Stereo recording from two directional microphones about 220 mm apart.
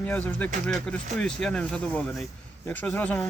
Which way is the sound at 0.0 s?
5° left (ahead or behind).